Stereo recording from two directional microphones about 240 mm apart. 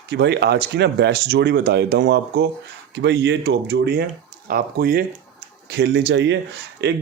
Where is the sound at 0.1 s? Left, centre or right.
Right.